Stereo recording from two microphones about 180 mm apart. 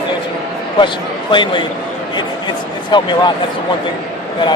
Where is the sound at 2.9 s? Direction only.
25° left (ahead or behind).